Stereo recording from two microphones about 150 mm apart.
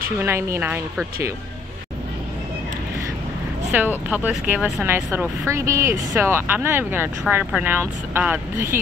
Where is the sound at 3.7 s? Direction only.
10° right (ahead or behind).